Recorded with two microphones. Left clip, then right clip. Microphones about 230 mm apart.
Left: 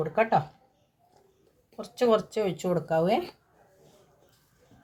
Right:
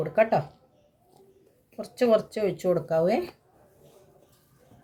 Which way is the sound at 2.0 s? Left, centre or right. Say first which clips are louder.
Right 1 dB; left.